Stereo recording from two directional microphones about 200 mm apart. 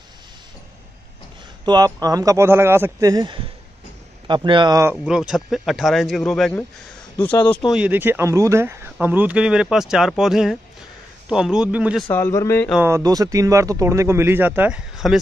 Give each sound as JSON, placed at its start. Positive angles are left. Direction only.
{"t": 1.6, "sound": "speech", "side_deg": -20}
{"t": 5.0, "sound": "speech", "side_deg": -5}
{"t": 12.1, "sound": "a man's voice", "side_deg": 15}
{"t": 12.8, "sound": "speech", "side_deg": -15}